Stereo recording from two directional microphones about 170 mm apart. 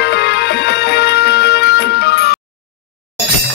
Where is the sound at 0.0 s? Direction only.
85° left.